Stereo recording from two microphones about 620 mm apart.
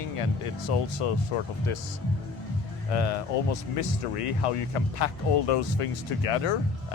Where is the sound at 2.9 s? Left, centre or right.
Left.